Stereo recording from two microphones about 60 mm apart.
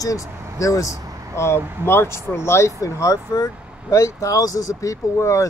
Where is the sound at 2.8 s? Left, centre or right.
Left.